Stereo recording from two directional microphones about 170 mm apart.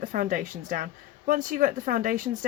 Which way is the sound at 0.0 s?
55° right (ahead or behind).